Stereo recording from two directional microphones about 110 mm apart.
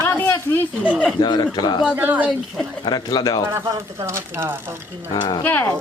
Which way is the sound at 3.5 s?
25° right (ahead or behind).